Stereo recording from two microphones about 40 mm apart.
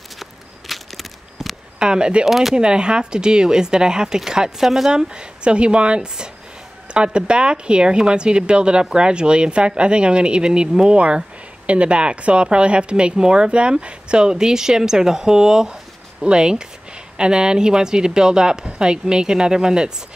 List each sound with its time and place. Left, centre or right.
0.2 s walk: centre
1.8 s speech: right
2.2 s speech: centre
2.5 s speech: right
4.9 s speech: right
11.0 s speech: right